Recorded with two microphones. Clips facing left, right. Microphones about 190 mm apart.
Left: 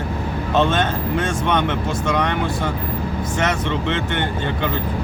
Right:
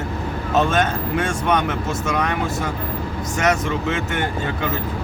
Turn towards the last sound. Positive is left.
turn(degrees=-5)  # may be behind; listen again after turning